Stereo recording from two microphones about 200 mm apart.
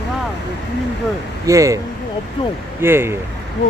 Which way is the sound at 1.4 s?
15° right (ahead or behind).